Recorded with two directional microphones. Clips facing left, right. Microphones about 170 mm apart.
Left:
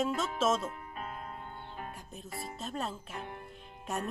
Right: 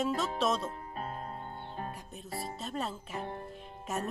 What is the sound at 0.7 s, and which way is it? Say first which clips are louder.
Music: right 2 dB; 35° right (ahead or behind).